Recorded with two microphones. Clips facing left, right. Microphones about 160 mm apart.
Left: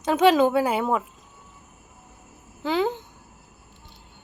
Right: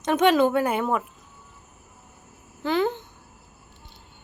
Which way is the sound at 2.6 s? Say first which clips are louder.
Even; 10° left (ahead or behind).